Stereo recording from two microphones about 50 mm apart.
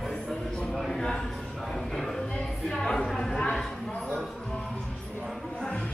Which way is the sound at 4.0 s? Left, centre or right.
Centre.